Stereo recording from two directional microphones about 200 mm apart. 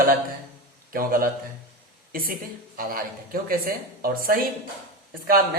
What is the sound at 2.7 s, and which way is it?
Speech, 45° right (ahead or behind).